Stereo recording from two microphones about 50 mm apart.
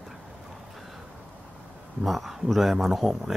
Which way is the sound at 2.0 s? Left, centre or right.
Centre.